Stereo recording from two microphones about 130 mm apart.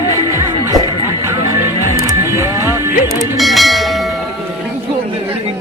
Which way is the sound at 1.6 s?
20° right (ahead or behind).